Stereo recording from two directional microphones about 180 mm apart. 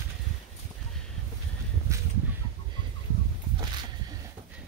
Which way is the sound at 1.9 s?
15° right (ahead or behind).